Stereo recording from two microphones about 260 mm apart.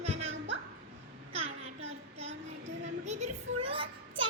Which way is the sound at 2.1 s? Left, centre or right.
Right.